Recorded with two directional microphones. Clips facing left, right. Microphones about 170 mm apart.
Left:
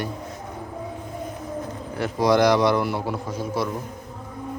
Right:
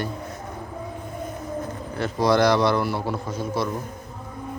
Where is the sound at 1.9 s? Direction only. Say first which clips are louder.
Left 1 dB; 15° left (ahead or behind).